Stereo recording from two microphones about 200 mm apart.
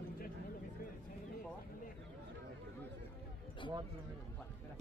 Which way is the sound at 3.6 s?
25° left (ahead or behind).